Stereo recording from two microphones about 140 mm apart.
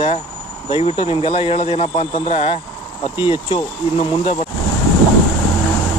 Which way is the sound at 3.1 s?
40° left (ahead or behind).